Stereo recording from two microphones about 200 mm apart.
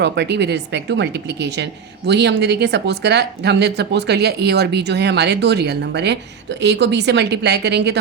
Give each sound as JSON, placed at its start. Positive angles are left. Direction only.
{"t": 0.0, "sound": "a woman's voice", "side_deg": -60}